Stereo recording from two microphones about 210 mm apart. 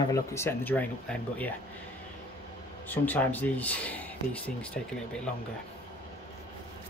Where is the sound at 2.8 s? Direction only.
10° left (ahead or behind).